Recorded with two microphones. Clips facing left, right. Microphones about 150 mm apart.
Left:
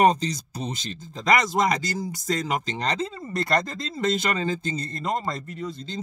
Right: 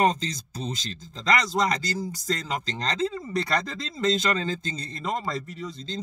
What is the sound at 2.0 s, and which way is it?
Speech, 10° left (ahead or behind).